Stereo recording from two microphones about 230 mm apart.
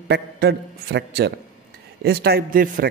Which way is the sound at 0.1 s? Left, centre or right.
Right.